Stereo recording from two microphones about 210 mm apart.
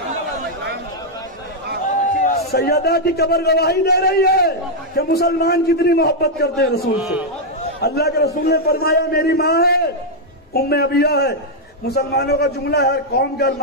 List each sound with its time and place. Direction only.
2.2 s a man's voice: 45° left (ahead or behind)
7.8 s a man's voice: 50° left (ahead or behind)